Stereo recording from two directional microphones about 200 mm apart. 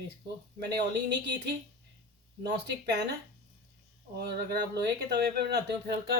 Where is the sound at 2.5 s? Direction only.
55° right (ahead or behind).